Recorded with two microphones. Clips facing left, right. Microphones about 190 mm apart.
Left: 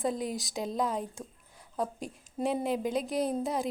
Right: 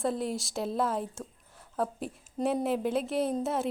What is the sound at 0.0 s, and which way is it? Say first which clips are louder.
A woman's voice: right 1 dB; centre (ahead or behind).